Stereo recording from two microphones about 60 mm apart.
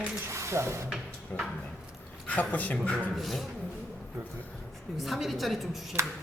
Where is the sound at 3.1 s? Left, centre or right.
Centre.